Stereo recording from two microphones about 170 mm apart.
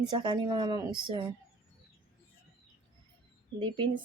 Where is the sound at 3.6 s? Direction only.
30° right (ahead or behind).